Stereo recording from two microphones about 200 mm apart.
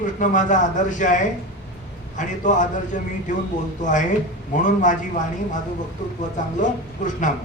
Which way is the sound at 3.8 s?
40° left (ahead or behind).